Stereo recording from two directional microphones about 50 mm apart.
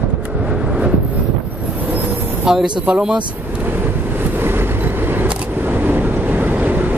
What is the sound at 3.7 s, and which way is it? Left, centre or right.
Vehicle, right.